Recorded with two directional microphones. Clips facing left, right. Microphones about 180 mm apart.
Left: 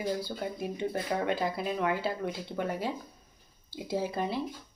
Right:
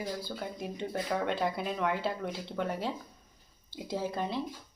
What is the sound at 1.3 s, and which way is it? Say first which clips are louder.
A woman's voice: left 1 dB; 5° left (ahead or behind).